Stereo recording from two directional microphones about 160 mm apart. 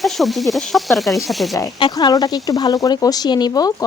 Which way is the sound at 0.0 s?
Centre (ahead or behind).